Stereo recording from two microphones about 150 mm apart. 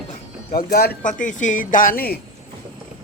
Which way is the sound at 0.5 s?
85° left.